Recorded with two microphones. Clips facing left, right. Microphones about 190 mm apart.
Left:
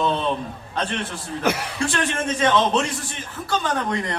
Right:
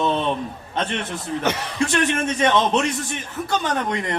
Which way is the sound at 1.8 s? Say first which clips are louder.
Right 3 dB; 20° right (ahead or behind).